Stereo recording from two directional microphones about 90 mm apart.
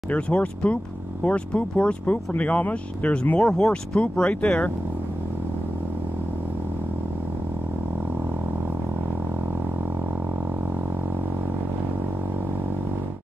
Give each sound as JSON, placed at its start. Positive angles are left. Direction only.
{"t": 0.1, "sound": "speech", "side_deg": 15}